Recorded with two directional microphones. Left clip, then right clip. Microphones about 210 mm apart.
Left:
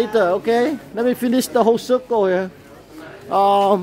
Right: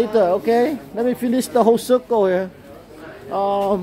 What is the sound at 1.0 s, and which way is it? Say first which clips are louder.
Speech: left 2 dB; 25° left (ahead or behind).